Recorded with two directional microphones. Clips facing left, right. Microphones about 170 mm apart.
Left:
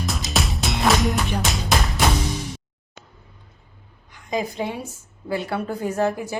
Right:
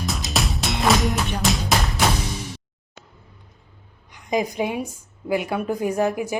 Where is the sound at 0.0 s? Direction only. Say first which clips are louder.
Even; centre (ahead or behind).